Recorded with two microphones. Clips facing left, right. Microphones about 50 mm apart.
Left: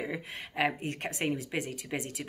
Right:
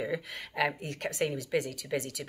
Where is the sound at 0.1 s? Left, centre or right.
Left.